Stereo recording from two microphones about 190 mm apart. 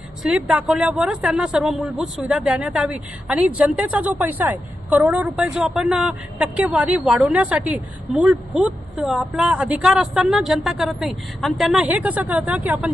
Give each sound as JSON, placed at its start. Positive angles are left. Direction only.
{"t": 0.2, "sound": "speech", "side_deg": -5}